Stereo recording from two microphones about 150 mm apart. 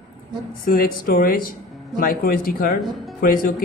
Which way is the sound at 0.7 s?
70° left (ahead or behind).